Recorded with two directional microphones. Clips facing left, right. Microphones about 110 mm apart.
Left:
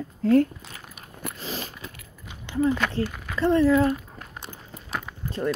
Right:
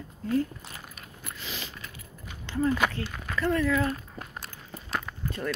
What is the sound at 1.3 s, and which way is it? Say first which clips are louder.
Biting: left 5 dB; 40° left (ahead or behind).